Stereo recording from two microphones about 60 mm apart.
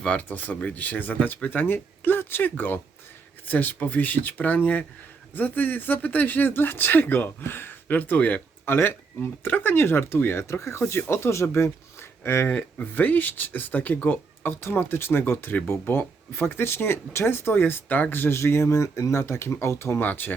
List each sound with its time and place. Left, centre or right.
0.2 s speech: left
8.6 s speech: left
12.5 s speech: left
14.5 s speech: left
20.0 s speech: left